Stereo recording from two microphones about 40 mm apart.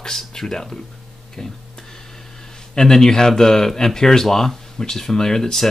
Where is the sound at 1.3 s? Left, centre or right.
Centre.